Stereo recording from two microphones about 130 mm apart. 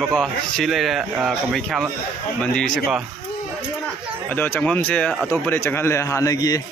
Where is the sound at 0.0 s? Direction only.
5° left (ahead or behind).